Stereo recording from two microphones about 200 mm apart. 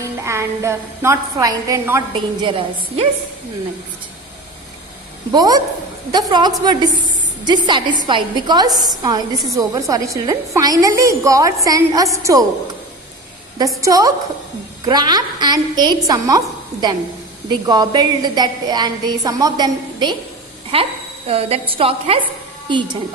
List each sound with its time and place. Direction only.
0.3 s a woman's voice: 15° right (ahead or behind)
5.3 s a woman's voice: 20° right (ahead or behind)
13.8 s a woman's voice: 15° right (ahead or behind)